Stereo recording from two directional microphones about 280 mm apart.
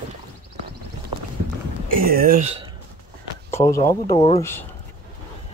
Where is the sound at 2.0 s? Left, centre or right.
Right.